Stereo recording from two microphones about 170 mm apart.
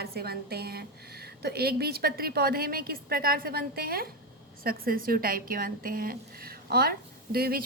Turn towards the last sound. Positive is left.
turn(degrees=-65)  # may be behind; listen again after turning